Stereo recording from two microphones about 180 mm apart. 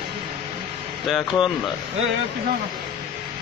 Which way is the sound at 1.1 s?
Centre (ahead or behind).